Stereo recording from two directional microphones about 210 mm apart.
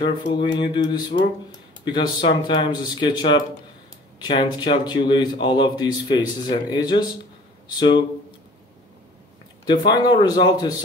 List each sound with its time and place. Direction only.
0.0 s a man's voice: 25° left (ahead or behind)
1.1 s speech: 30° left (ahead or behind)
1.5 s a man's voice: 20° left (ahead or behind)
9.7 s a man's voice: 20° left (ahead or behind)